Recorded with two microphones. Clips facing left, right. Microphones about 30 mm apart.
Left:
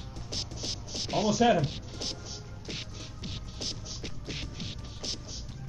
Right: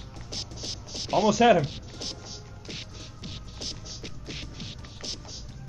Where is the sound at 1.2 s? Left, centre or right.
Right.